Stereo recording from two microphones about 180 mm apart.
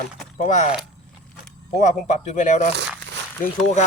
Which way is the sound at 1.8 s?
40° left (ahead or behind).